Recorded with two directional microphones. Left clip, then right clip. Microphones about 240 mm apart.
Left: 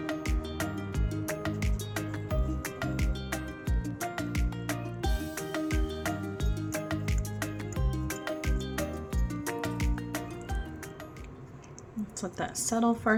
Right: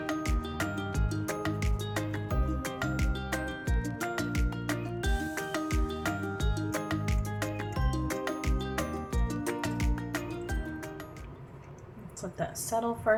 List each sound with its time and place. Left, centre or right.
0.0 s music: centre
12.4 s a woman's voice: left